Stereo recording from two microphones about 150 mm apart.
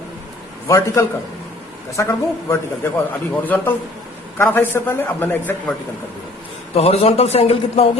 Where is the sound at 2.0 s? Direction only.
20° left (ahead or behind).